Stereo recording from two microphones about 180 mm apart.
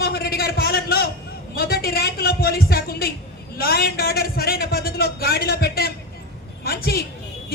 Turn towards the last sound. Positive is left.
turn(degrees=60)  # may be behind; listen again after turning